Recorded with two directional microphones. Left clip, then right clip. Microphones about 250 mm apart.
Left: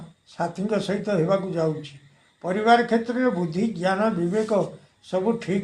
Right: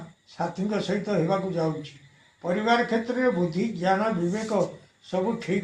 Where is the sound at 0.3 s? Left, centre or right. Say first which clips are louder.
Left 3 dB; left.